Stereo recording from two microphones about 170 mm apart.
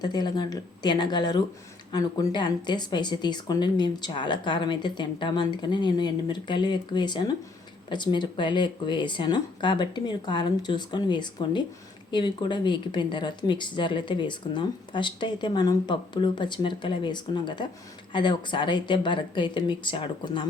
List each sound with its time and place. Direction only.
0.0 s speech: 25° left (ahead or behind)